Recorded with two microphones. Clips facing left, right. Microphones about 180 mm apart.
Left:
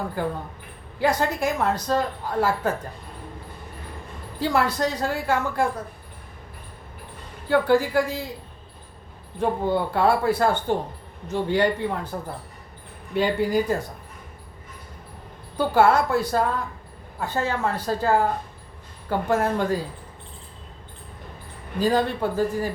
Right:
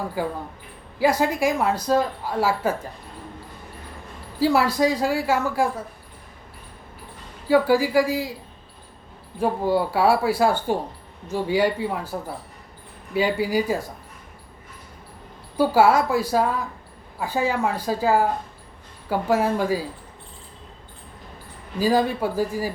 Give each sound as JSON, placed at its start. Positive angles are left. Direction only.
{"t": 0.0, "sound": "speech", "side_deg": -5}
{"t": 4.4, "sound": "speech", "side_deg": -5}
{"t": 7.4, "sound": "speech", "side_deg": -5}
{"t": 9.4, "sound": "speech", "side_deg": -5}
{"t": 13.1, "sound": "speech", "side_deg": -5}
{"t": 15.5, "sound": "speech", "side_deg": -5}
{"t": 21.8, "sound": "speech", "side_deg": -5}